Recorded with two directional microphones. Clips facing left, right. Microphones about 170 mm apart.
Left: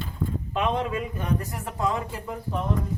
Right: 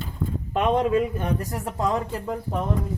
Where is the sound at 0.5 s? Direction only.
45° right (ahead or behind).